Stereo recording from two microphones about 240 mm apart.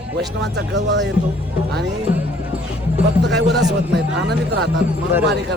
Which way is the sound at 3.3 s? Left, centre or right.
Right.